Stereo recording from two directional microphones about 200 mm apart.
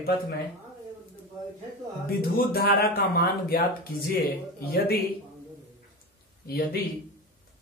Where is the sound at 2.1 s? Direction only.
50° left (ahead or behind).